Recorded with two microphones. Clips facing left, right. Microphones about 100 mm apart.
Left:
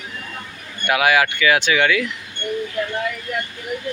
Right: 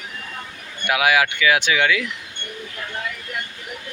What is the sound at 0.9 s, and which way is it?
Speech, 10° right (ahead or behind).